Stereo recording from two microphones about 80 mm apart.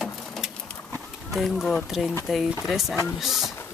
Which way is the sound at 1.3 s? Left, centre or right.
Centre.